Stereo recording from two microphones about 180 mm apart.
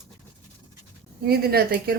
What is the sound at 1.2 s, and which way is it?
Speech, 60° right (ahead or behind).